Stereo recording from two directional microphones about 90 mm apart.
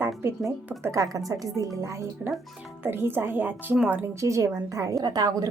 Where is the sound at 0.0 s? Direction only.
30° right (ahead or behind).